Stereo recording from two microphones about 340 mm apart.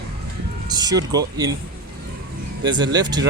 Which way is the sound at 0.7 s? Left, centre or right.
Centre.